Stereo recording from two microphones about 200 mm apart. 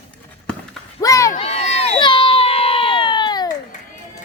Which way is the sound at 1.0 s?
15° left (ahead or behind).